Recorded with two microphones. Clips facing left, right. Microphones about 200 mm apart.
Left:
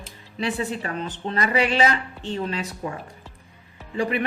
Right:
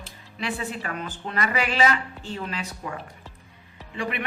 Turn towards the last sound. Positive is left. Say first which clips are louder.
# left 6 dB
turn(degrees=35)  # may be behind; listen again after turning